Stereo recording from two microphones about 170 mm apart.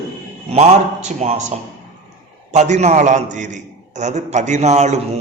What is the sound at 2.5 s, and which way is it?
A man's voice, 45° right (ahead or behind).